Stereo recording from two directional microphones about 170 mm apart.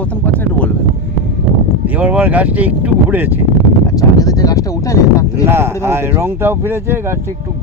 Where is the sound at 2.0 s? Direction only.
10° right (ahead or behind).